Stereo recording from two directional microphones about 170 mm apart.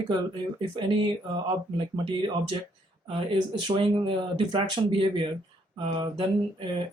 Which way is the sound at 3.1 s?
25° right (ahead or behind).